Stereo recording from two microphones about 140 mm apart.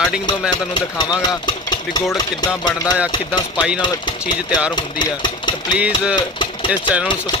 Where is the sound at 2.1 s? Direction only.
30° left (ahead or behind).